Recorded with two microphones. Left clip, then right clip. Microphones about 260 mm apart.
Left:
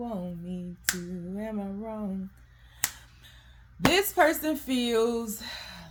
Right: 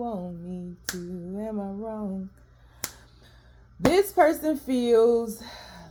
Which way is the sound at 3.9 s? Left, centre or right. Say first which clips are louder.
Right 4 dB; left.